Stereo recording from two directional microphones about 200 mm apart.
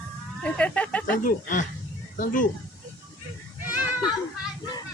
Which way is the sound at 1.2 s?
40° left (ahead or behind).